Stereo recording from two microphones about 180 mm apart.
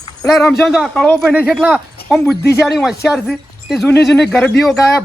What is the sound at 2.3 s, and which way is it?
Speech, 65° left (ahead or behind).